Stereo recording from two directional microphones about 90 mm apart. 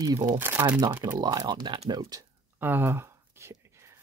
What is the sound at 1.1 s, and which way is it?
Speech, 50° right (ahead or behind).